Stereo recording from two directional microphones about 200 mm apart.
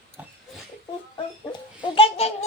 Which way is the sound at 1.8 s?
25° left (ahead or behind).